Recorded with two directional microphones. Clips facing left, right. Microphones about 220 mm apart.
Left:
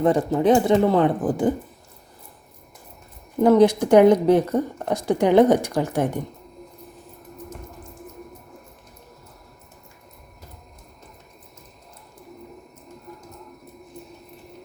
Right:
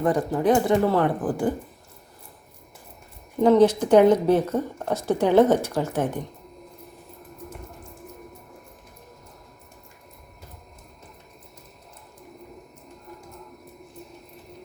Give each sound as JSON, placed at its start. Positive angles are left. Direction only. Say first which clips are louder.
{"t": 0.0, "sound": "speech", "louder": "left 3 dB", "side_deg": 25}
{"t": 3.4, "sound": "a woman's voice", "louder": "left 1 dB", "side_deg": 10}